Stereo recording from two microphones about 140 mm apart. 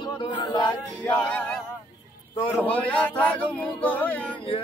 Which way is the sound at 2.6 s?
10° left (ahead or behind).